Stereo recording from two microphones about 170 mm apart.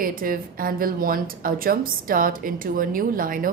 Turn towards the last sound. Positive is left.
turn(degrees=-55)  # may be behind; listen again after turning